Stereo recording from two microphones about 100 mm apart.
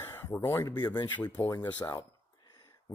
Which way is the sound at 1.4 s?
25° left (ahead or behind).